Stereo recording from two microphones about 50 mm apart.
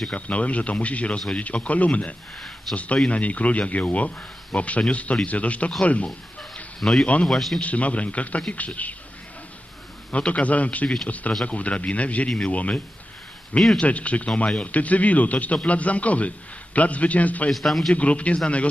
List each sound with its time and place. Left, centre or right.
0.1 s a man's voice: left
2.7 s a man's voice: centre
3.1 s a man's voice: left
6.7 s speech: centre
7.0 s a man's voice: left
7.3 s a man's voice: centre
7.6 s a man's voice: left
10.1 s a man's voice: left
17.6 s a man's voice: centre
17.9 s a man's voice: left